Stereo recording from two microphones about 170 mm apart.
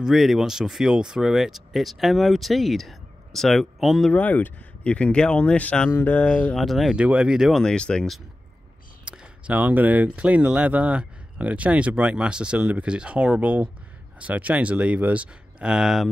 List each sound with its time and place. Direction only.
0.0 s speech: centre (ahead or behind)